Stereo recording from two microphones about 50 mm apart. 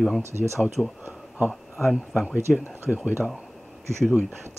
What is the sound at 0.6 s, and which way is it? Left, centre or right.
Speech, centre.